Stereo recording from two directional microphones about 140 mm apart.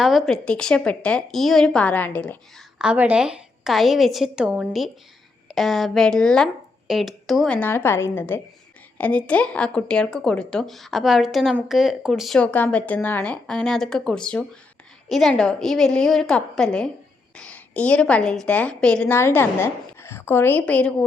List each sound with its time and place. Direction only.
0.0 s a woman's voice: centre (ahead or behind)
2.7 s a woman's voice: 10° right (ahead or behind)
12.4 s a woman's voice: 10° left (ahead or behind)